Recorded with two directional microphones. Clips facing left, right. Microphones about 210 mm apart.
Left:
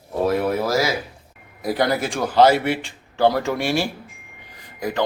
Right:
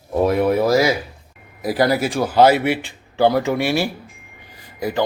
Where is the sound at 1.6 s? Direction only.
5° right (ahead or behind).